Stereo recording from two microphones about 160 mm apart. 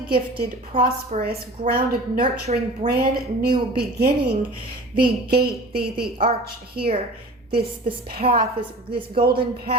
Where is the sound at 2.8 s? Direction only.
75° right (ahead or behind).